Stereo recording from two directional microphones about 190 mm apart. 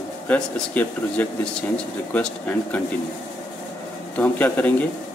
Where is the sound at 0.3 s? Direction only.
10° left (ahead or behind).